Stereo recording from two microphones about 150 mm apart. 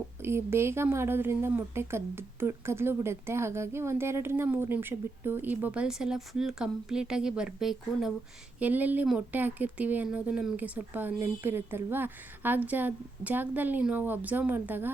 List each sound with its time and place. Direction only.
0.2 s a woman's voice: 15° right (ahead or behind)